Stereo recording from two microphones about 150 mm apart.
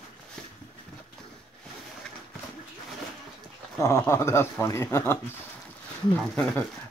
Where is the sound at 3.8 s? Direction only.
20° left (ahead or behind).